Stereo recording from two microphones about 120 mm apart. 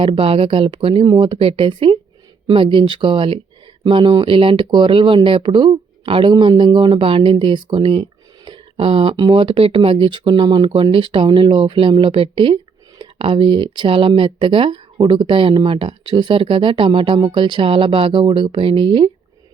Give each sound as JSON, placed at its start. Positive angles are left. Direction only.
{"t": 0.0, "sound": "speech", "side_deg": -50}
{"t": 1.0, "sound": "speech", "side_deg": -40}